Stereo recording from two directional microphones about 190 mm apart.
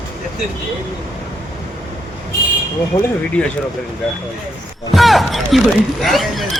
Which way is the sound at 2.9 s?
15° left (ahead or behind).